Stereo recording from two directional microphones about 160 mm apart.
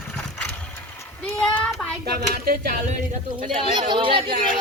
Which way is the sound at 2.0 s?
70° right (ahead or behind).